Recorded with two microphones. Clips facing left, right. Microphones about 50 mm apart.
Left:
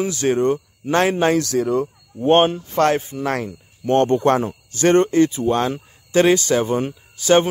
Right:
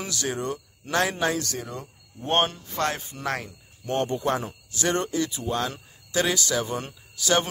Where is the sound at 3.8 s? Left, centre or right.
Left.